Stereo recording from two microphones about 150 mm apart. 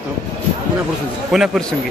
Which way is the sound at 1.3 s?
5° right (ahead or behind).